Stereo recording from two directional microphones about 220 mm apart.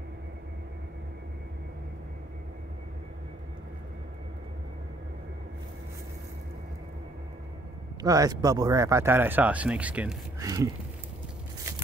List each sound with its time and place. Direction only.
8.0 s speech: 15° right (ahead or behind)